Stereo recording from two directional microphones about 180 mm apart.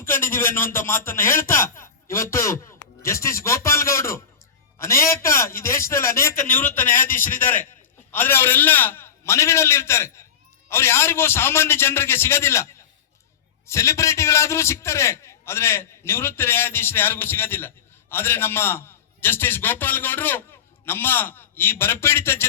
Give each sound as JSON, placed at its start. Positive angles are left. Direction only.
{"t": 0.1, "sound": "a man's voice", "side_deg": 15}
{"t": 13.7, "sound": "a man's voice", "side_deg": 15}